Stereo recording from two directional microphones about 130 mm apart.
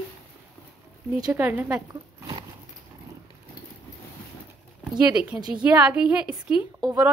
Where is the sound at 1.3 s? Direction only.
15° right (ahead or behind).